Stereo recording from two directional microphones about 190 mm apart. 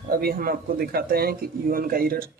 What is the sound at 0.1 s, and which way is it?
A man's voice, 50° right (ahead or behind).